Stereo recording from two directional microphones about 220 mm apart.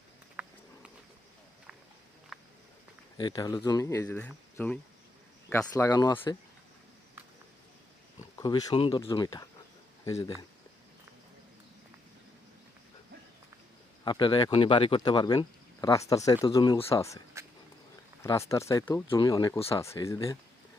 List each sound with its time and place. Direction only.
0.4 s a sound: 5° right (ahead or behind)
2.3 s a sound: centre (ahead or behind)
3.2 s speech: 20° left (ahead or behind)
8.4 s speech: 15° left (ahead or behind)
14.0 s speech: 20° left (ahead or behind)
19.8 s speech: 15° left (ahead or behind)